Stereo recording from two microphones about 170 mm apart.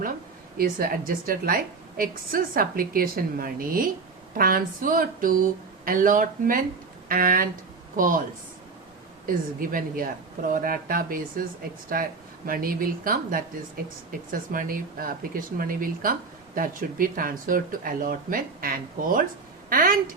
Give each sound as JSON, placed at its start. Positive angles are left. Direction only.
{"t": 0.5, "sound": "a woman's voice", "side_deg": -60}
{"t": 9.2, "sound": "a woman's voice", "side_deg": -55}